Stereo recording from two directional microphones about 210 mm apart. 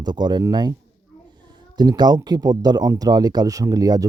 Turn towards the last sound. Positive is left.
turn(degrees=-15)  # may be behind; listen again after turning